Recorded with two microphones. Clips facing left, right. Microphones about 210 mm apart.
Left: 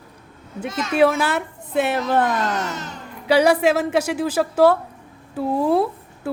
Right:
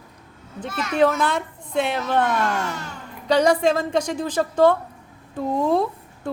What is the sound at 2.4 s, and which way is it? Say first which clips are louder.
Speech: even; 20° left (ahead or behind).